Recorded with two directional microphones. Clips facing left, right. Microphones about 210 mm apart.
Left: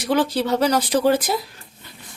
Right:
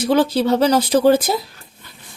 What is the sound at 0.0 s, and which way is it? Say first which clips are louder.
Speech: right 4 dB; 25° right (ahead or behind).